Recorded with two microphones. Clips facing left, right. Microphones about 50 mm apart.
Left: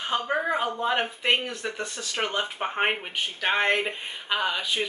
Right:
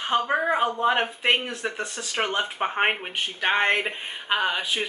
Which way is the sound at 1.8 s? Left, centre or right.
Right.